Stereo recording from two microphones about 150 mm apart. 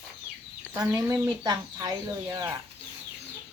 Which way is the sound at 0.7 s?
20° right (ahead or behind).